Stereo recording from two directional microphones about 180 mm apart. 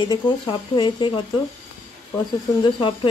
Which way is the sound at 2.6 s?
30° left (ahead or behind).